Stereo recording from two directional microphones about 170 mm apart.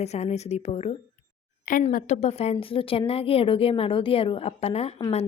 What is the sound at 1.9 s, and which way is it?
A woman's voice, 40° left (ahead or behind).